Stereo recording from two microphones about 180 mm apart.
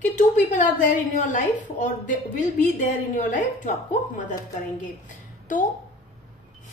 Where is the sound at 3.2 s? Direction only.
45° left (ahead or behind).